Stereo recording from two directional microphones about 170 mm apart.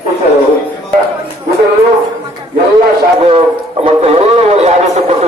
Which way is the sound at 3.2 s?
35° right (ahead or behind).